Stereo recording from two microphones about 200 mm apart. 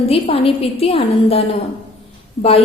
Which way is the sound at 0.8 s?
30° left (ahead or behind).